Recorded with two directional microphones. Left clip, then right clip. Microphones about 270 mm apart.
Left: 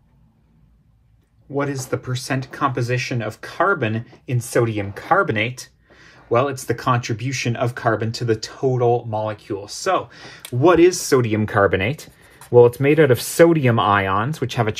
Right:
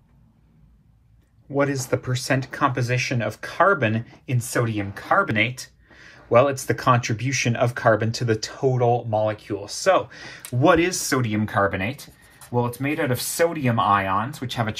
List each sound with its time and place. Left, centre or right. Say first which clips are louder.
1.5 s speech: right 1 dB; centre; by 14.8 s left